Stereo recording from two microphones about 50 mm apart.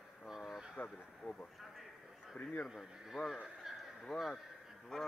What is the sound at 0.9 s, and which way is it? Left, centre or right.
Speech, left.